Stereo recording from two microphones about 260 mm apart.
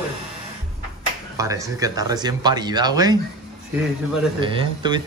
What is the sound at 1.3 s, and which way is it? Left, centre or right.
A man's voice, centre.